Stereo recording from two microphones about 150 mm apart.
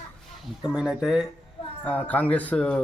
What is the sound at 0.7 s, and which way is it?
Speech, 5° right (ahead or behind).